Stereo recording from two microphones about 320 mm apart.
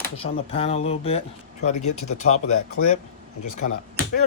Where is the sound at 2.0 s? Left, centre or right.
Left.